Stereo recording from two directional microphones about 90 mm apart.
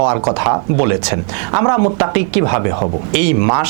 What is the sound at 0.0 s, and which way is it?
Speech, 15° right (ahead or behind).